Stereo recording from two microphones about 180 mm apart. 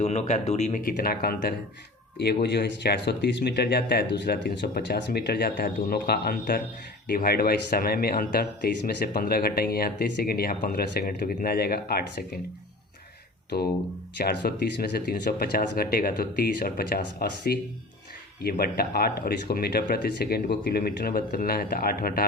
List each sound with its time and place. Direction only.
0.0 s speech: 40° left (ahead or behind); by 1.5 s 55° left (ahead or behind)
2.1 s speech: 65° left (ahead or behind)
14.3 s speech: 60° left (ahead or behind)